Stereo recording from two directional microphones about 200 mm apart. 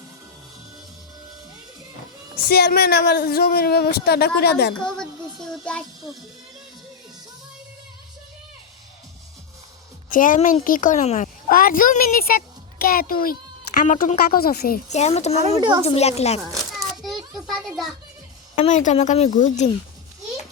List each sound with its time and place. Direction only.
2.4 s a woman's voice: 50° left (ahead or behind)
4.9 s a child's voice: 5° left (ahead or behind)
10.1 s a woman's voice: 40° left (ahead or behind)
14.8 s a woman's voice: 35° left (ahead or behind)
16.5 s a sound: centre (ahead or behind)
18.5 s a woman's voice: 35° left (ahead or behind)